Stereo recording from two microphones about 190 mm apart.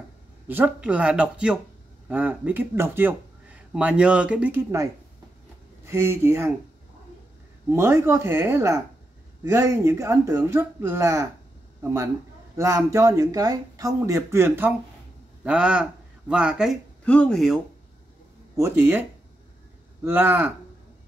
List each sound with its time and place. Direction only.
0.5 s speech: 10° right (ahead or behind)
5.9 s speech: 15° right (ahead or behind)
7.7 s speech: 15° right (ahead or behind)
18.6 s speech: 10° right (ahead or behind)